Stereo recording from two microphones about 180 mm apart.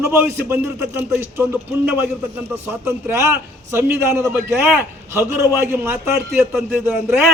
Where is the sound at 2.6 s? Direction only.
15° right (ahead or behind).